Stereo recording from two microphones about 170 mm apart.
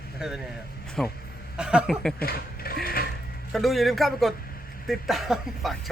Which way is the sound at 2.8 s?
60° left (ahead or behind).